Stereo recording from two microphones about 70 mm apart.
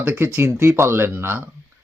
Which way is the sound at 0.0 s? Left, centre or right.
Right.